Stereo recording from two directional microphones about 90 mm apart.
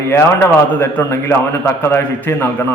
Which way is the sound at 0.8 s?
25° left (ahead or behind).